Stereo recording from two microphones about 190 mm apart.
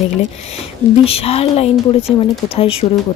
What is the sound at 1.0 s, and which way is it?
Speech, 30° left (ahead or behind).